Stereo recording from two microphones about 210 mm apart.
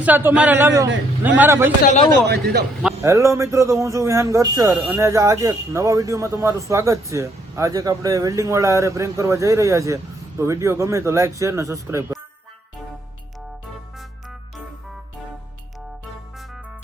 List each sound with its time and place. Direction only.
0.0 s speech: 10° right (ahead or behind)
1.8 s speech: 35° left (ahead or behind)
2.2 s a man's voice: 50° right (ahead or behind)
3.0 s speech: 15° right (ahead or behind)